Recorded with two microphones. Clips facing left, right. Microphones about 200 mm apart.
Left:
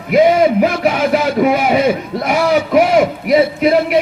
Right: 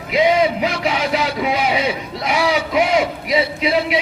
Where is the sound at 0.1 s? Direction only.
50° left (ahead or behind).